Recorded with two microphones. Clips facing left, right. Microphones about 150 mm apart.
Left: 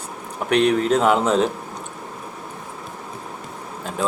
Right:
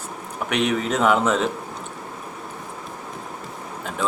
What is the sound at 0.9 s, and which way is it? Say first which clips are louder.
Speech: left 2 dB; 30° left (ahead or behind).